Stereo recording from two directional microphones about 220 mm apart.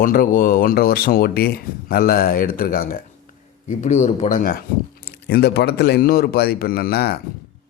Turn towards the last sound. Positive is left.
turn(degrees=45)  # may be behind; listen again after turning